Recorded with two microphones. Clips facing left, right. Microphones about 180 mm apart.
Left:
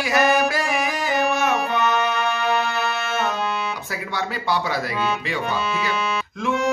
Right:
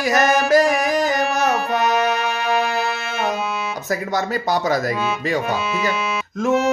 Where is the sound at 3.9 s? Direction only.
45° right (ahead or behind).